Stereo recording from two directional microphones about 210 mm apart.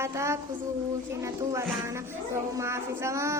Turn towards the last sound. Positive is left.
turn(degrees=-15)  # may be behind; listen again after turning